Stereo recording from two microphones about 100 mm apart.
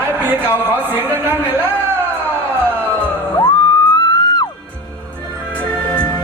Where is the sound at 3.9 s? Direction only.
45° left (ahead or behind).